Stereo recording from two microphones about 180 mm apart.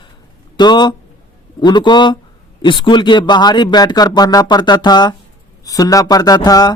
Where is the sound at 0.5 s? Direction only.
25° left (ahead or behind).